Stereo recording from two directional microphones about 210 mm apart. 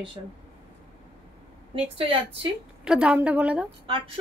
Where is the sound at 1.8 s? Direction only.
25° right (ahead or behind).